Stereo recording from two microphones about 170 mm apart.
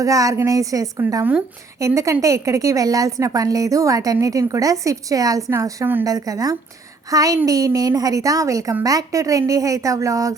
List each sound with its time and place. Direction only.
0.0 s a woman's voice: 20° right (ahead or behind)